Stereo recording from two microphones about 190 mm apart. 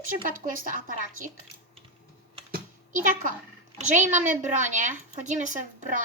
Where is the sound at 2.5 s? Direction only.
45° right (ahead or behind).